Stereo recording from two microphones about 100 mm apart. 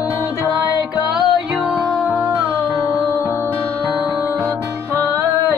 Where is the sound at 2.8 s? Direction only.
30° left (ahead or behind).